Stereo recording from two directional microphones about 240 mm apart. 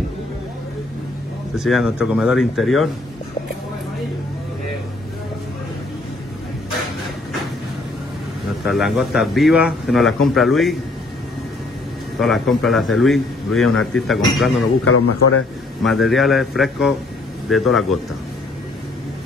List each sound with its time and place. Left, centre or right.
1.6 s a man's voice: centre
8.6 s a man's voice: centre
12.2 s a man's voice: centre
14.9 s a man's voice: left
15.8 s a man's voice: centre